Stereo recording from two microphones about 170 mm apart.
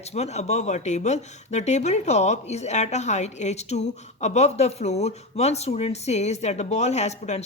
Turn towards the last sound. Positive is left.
turn(degrees=40)  # may be behind; listen again after turning